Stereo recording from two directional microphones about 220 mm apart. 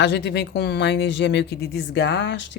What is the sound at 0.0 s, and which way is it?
Speech, 50° left (ahead or behind).